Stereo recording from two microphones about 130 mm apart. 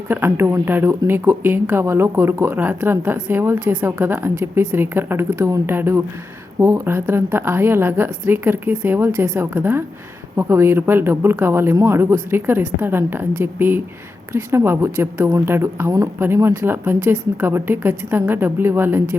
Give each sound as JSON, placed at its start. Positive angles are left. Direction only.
{"t": 0.1, "sound": "speech", "side_deg": -20}